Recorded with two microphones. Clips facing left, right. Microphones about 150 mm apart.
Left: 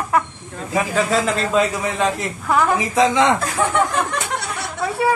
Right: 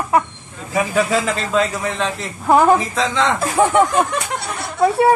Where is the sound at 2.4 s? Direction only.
35° right (ahead or behind).